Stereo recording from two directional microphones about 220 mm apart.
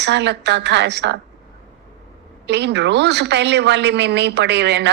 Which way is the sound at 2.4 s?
50° right (ahead or behind).